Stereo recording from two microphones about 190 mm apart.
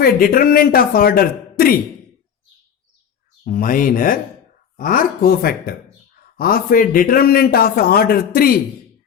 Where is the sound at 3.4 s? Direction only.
45° left (ahead or behind).